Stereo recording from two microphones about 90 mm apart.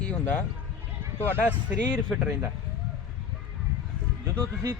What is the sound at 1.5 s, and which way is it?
Speech, 10° left (ahead or behind).